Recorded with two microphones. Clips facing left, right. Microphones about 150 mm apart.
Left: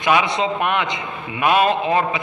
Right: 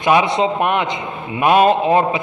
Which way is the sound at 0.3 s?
40° right (ahead or behind).